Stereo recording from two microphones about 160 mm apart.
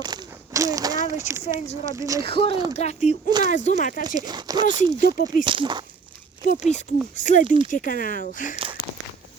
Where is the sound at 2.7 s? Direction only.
45° left (ahead or behind).